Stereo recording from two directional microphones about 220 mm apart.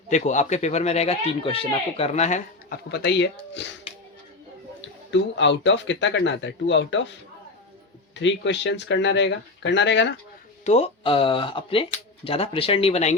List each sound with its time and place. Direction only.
0.1 s a man's voice: 35° left (ahead or behind)
2.9 s speech: 50° left (ahead or behind)
5.4 s speech: 55° left (ahead or behind)
10.6 s speech: 30° left (ahead or behind)